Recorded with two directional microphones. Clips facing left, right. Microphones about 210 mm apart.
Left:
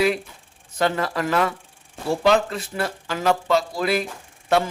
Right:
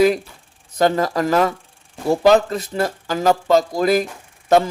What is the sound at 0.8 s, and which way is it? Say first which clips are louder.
A man's voice: right 5 dB; 40° right (ahead or behind).